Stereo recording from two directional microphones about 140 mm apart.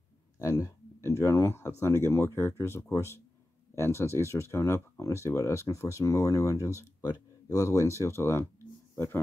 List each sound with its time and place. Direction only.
0.4 s speech: 25° left (ahead or behind)